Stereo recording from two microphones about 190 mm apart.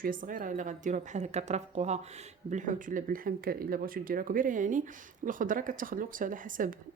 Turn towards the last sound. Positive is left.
turn(degrees=-45)  # may be behind; listen again after turning